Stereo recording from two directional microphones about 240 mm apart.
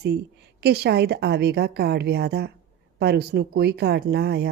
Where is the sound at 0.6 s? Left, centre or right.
Right.